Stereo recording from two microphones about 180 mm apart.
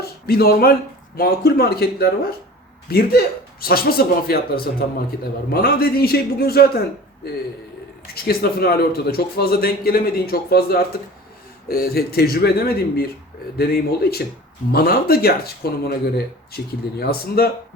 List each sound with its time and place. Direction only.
0.0 s a man's voice: 60° left (ahead or behind)
8.0 s a man's voice: 60° left (ahead or behind)